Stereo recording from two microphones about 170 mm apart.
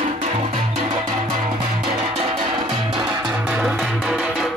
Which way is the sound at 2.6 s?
25° right (ahead or behind).